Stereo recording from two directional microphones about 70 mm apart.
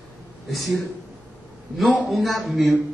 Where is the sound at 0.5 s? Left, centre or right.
Centre.